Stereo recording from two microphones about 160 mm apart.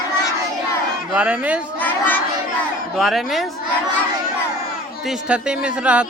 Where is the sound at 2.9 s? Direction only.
Centre (ahead or behind).